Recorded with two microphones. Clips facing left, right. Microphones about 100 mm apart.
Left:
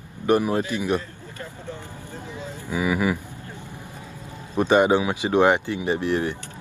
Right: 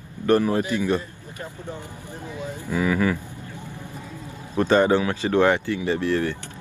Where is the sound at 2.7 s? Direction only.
10° left (ahead or behind).